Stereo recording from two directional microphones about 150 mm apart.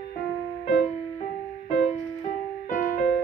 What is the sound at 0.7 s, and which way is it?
Music, 50° left (ahead or behind).